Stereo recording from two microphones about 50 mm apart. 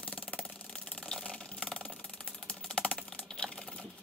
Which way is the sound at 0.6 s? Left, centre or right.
Centre.